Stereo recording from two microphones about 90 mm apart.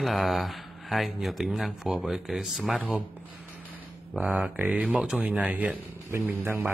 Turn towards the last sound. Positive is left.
turn(degrees=-20)  # may be behind; listen again after turning